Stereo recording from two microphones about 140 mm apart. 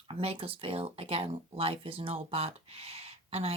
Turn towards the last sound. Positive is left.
turn(degrees=-45)  # may be behind; listen again after turning